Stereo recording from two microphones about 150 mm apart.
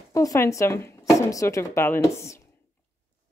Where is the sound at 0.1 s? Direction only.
20° left (ahead or behind).